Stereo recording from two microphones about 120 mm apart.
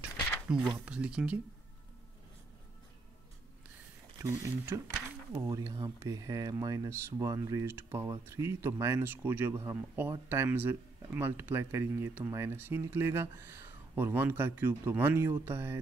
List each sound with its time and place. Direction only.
0.5 s speech: 5° right (ahead or behind)
4.2 s speech: 20° right (ahead or behind)